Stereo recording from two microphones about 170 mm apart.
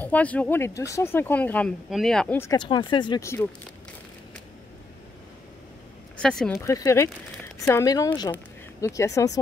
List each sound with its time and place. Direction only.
0.0 s speech: 10° left (ahead or behind)
2.5 s speech: 25° left (ahead or behind)
6.1 s speech: 5° left (ahead or behind)
6.5 s speech: 15° left (ahead or behind)